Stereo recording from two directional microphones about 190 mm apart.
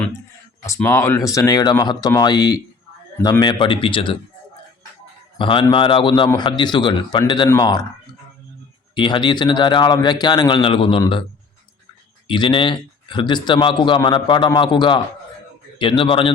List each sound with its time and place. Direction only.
0.6 s a man's voice: 15° left (ahead or behind)
5.4 s a man's voice: 25° left (ahead or behind)
9.0 s a man's voice: 25° left (ahead or behind)
12.3 s a man's voice: 25° left (ahead or behind)